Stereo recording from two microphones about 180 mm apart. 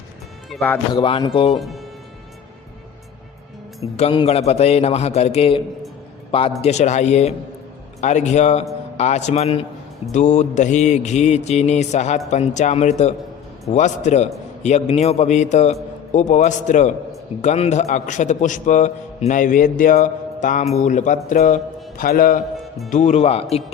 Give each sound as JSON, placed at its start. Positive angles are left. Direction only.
{"t": 0.6, "sound": "speech", "side_deg": 10}
{"t": 0.9, "sound": "a man's voice", "side_deg": 30}
{"t": 1.5, "sound": "speech", "side_deg": 0}
{"t": 3.9, "sound": "a man's voice", "side_deg": 30}
{"t": 22.9, "sound": "a man's voice", "side_deg": 40}